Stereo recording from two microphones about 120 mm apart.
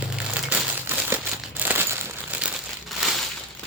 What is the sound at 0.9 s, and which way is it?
Crumpling, 15° right (ahead or behind).